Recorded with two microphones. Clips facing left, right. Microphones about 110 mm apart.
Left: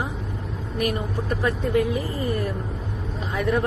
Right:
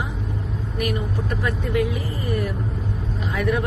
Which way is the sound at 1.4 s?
35° left (ahead or behind).